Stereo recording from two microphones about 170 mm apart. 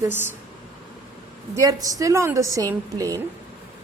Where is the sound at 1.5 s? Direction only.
20° right (ahead or behind).